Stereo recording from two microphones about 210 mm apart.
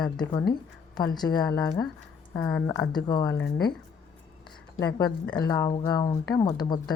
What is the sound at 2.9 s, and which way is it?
Speech, 20° left (ahead or behind).